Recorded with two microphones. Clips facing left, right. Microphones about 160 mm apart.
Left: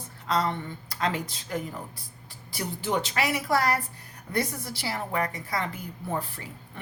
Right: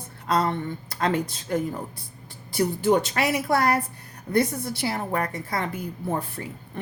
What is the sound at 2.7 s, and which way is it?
Speech, 50° right (ahead or behind).